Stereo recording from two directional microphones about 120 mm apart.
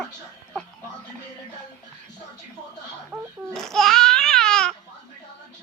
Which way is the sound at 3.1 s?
20° right (ahead or behind).